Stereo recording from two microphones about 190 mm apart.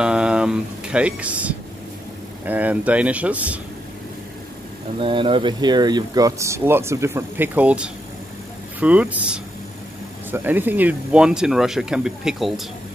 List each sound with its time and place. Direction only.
0.0 s speech: 5° right (ahead or behind)
4.9 s speech: 25° right (ahead or behind); by 12.6 s centre (ahead or behind)